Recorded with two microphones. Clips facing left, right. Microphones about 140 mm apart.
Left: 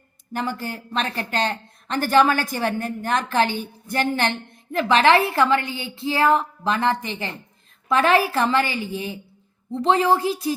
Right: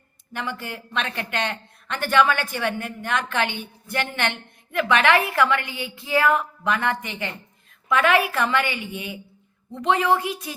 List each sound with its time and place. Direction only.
0.3 s a woman's voice: 40° left (ahead or behind)